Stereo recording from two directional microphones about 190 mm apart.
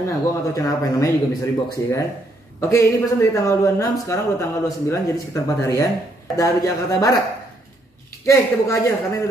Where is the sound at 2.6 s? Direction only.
15° left (ahead or behind).